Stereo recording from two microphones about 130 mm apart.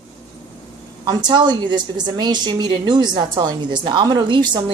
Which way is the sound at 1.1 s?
35° right (ahead or behind).